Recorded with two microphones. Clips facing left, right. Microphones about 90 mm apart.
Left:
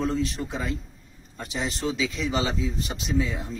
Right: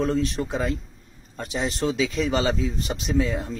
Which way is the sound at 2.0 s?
50° right (ahead or behind).